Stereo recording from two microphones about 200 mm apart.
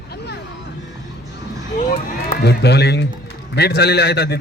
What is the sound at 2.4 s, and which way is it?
A man's voice, 55° left (ahead or behind).